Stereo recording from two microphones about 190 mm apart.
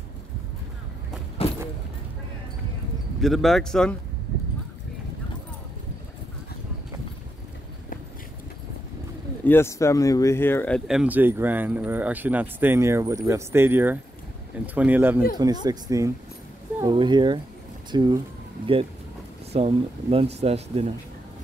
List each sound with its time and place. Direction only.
3.2 s speech: centre (ahead or behind)
9.4 s speech: 10° left (ahead or behind)
10.9 s speech: 5° right (ahead or behind)
15.3 s speech: 20° right (ahead or behind)
19.5 s speech: 30° right (ahead or behind)